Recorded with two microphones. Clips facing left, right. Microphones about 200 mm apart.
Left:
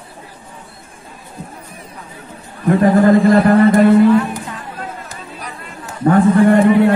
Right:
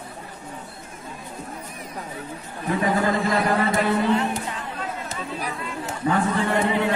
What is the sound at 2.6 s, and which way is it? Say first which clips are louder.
Speech: left 11 dB; 50° left (ahead or behind).